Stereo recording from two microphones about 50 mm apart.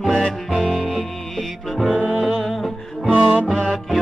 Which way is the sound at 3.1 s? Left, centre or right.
Right.